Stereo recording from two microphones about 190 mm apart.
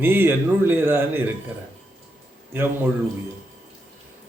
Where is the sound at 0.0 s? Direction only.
10° right (ahead or behind).